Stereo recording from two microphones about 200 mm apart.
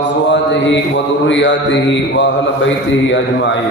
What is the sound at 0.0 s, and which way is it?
Mantra, 65° left (ahead or behind).